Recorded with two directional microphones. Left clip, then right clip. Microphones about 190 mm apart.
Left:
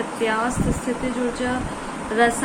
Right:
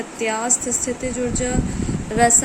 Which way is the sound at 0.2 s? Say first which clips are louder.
Even; 40° right (ahead or behind).